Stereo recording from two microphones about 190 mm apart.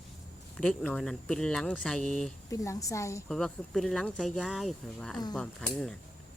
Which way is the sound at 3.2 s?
Centre (ahead or behind).